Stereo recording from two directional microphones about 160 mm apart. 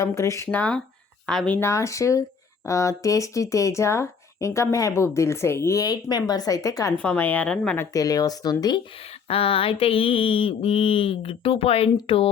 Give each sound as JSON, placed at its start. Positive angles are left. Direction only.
{"t": 0.0, "sound": "speech", "side_deg": 20}
{"t": 1.3, "sound": "speech", "side_deg": 5}
{"t": 7.0, "sound": "speech", "side_deg": 10}
{"t": 7.9, "sound": "speech", "side_deg": 20}
{"t": 9.2, "sound": "mantra", "side_deg": 35}